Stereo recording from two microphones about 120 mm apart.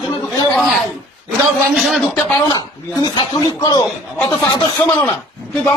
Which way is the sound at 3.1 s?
35° left (ahead or behind).